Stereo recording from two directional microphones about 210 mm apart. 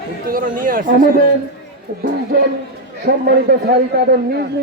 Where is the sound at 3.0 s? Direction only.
45° right (ahead or behind).